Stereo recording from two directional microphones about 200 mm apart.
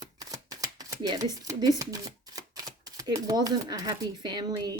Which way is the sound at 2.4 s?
15° right (ahead or behind).